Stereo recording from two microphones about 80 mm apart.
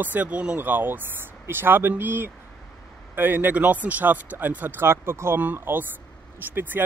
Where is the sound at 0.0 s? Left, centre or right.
Right.